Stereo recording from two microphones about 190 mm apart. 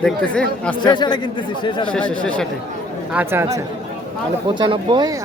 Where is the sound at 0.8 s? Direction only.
25° left (ahead or behind).